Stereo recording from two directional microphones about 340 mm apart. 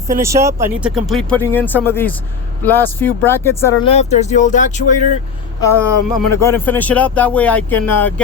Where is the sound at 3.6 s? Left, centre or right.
Centre.